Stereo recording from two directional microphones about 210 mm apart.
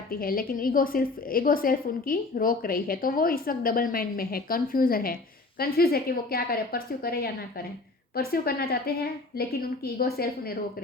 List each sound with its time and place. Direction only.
0.1 s a woman's voice: 45° left (ahead or behind)